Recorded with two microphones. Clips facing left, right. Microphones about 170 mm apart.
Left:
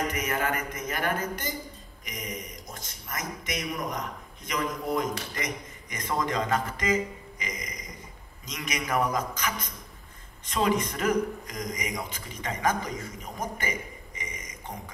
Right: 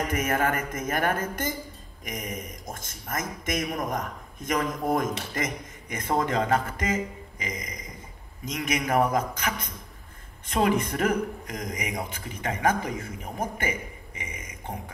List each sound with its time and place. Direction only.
0.1 s a man's voice: 50° right (ahead or behind)
8.5 s a man's voice: 55° right (ahead or behind)